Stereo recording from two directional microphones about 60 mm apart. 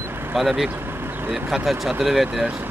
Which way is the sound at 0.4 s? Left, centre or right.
Centre.